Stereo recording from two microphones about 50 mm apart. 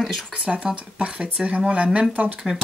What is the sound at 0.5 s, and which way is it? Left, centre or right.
Speech, centre.